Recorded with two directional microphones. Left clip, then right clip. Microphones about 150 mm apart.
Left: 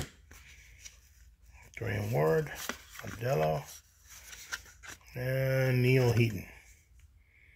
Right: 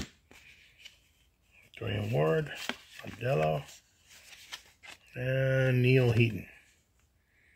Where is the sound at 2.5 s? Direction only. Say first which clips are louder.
Right 2 dB; 25° right (ahead or behind).